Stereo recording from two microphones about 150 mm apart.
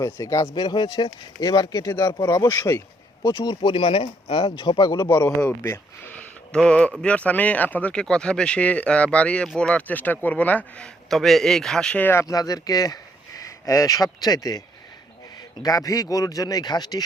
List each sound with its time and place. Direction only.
0.0 s speech: 20° left (ahead or behind)
5.0 s speech: 15° left (ahead or behind)
15.6 s speech: 25° left (ahead or behind)